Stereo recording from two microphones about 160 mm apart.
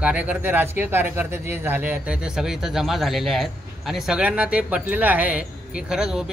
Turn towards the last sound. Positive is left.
turn(degrees=-5)  # may be behind; listen again after turning